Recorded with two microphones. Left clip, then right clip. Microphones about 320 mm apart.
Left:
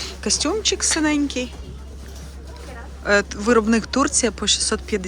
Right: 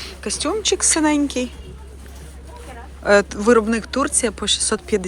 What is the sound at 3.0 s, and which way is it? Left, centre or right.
Speech, centre.